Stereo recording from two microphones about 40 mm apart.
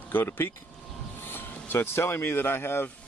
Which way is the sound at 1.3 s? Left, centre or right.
Left.